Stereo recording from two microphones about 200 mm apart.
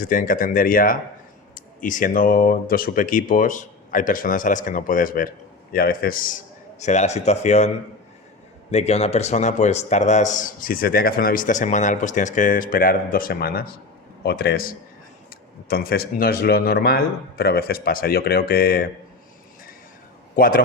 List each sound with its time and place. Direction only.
0.0 s a man's voice: 45° left (ahead or behind)
8.7 s a man's voice: 30° left (ahead or behind); by 18.9 s 50° left (ahead or behind)
20.3 s a man's voice: 45° left (ahead or behind)